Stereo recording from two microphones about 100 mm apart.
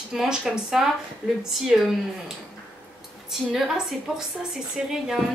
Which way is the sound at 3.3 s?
5° right (ahead or behind).